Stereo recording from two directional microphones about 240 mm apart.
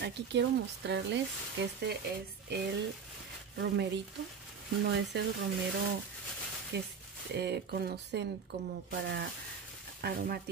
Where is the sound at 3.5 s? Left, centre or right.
Right.